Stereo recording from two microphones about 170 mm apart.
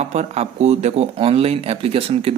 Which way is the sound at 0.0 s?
40° right (ahead or behind).